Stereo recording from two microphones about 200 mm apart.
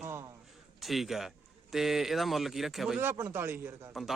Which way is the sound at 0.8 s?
Centre (ahead or behind).